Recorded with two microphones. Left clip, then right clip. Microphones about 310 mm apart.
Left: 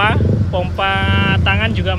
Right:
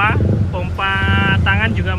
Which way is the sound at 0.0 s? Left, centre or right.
Centre.